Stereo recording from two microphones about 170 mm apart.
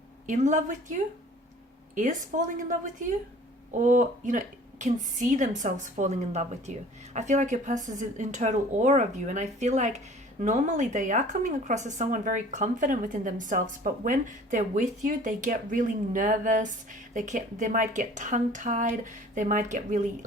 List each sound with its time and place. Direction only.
0.3 s a woman's voice: 45° right (ahead or behind)